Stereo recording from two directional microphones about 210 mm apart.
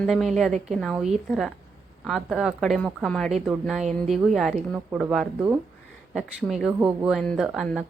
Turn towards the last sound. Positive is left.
turn(degrees=0)  # may be behind; listen again after turning